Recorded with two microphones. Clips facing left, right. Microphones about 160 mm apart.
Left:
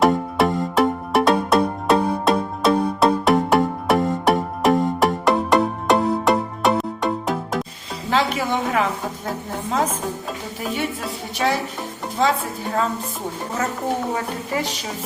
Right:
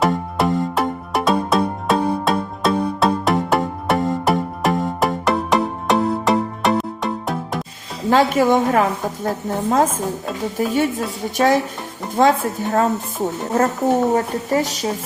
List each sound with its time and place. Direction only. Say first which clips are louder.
0.0 s music: left 1 dB; centre (ahead or behind)
8.1 s a woman's voice: right 6 dB; 45° right (ahead or behind)
14.1 s a woman's voice: right 6 dB; 40° right (ahead or behind)